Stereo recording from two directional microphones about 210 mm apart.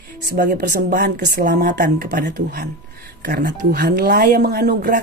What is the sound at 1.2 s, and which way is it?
Speech, 50° right (ahead or behind).